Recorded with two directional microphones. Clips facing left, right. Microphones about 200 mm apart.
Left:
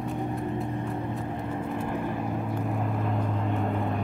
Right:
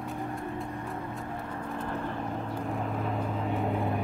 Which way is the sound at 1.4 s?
20° left (ahead or behind).